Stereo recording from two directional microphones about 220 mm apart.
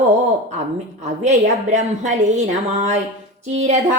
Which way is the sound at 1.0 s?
30° right (ahead or behind).